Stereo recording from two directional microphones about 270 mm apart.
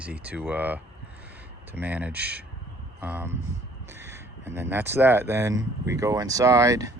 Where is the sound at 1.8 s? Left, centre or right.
Centre.